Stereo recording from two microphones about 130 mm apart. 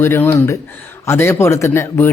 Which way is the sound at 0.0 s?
15° left (ahead or behind).